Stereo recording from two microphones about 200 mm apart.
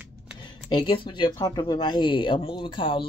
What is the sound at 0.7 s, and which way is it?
Speech, 25° left (ahead or behind).